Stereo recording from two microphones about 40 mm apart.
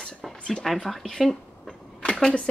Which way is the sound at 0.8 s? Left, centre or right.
Centre.